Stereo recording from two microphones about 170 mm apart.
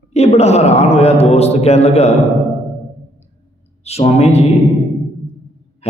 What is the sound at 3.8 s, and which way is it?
Speech, 35° left (ahead or behind).